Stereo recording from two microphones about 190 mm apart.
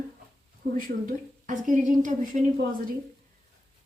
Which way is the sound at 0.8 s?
45° right (ahead or behind).